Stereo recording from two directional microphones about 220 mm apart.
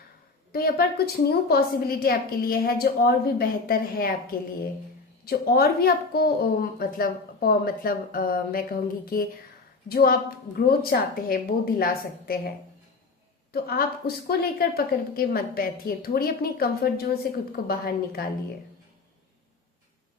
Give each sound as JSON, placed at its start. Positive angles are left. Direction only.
{"t": 0.5, "sound": "a woman's voice", "side_deg": 45}
{"t": 5.2, "sound": "a woman's voice", "side_deg": 45}
{"t": 13.5, "sound": "a woman's voice", "side_deg": 45}